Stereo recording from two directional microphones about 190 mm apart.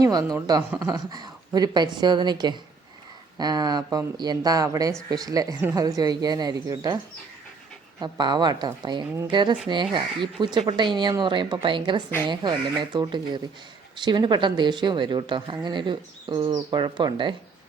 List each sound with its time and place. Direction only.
0.0 s a woman's voice: 20° right (ahead or behind)